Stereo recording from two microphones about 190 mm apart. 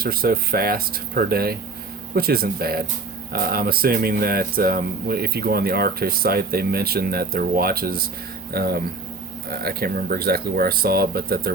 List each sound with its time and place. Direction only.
0.0 s speech: 50° right (ahead or behind)